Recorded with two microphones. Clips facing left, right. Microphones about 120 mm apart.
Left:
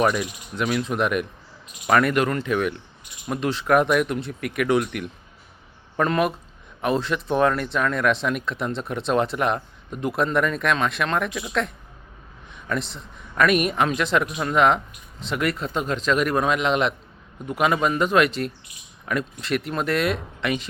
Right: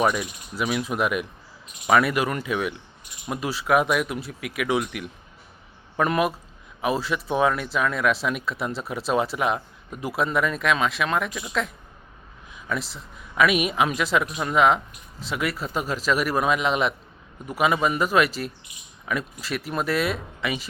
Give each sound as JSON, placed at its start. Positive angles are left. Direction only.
{"t": 0.0, "sound": "speech", "side_deg": -5}